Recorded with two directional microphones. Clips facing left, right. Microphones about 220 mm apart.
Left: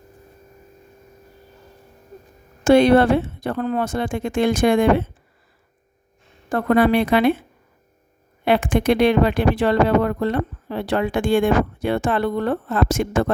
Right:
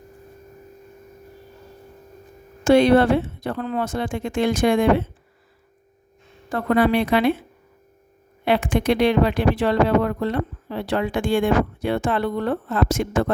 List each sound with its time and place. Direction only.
2.6 s speech: 50° left (ahead or behind)
6.5 s speech: 50° left (ahead or behind)
8.4 s speech: 50° left (ahead or behind)